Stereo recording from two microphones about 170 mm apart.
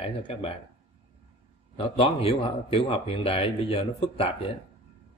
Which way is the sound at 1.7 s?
35° left (ahead or behind).